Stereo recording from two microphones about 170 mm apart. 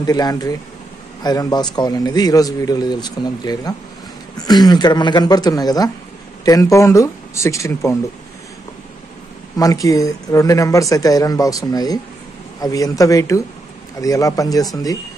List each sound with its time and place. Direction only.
0.0 s a man's voice: 20° left (ahead or behind)
9.6 s a man's voice: 20° left (ahead or behind)